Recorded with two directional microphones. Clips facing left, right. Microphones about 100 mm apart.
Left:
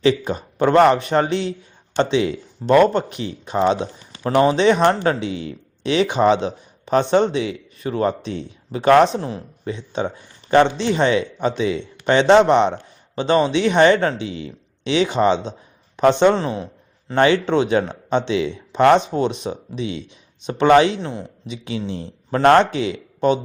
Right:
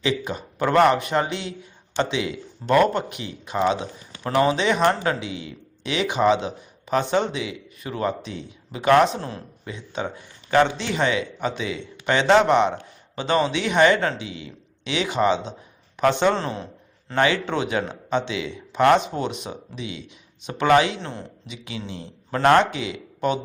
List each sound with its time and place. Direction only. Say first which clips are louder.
0.0 s speech: left 7 dB; 35° left (ahead or behind); by 16.6 s 15° left (ahead or behind)
17.2 s speech: left 6 dB; 25° left (ahead or behind)
21.0 s speech: left 5 dB; 15° left (ahead or behind)